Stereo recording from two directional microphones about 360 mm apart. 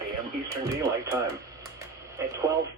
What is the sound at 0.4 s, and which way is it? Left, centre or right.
Speech, centre.